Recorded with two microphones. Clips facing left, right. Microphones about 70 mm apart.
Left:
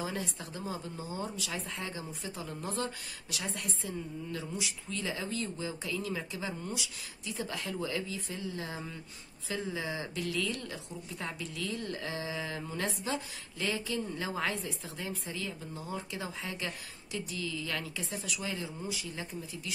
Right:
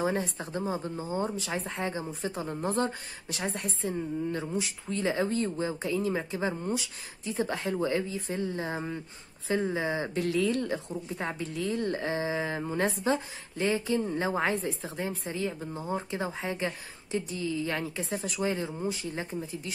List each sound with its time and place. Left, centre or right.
0.0 s speech: right